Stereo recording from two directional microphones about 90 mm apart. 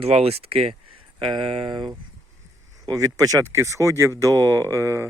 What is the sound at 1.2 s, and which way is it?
Speech, 70° right (ahead or behind).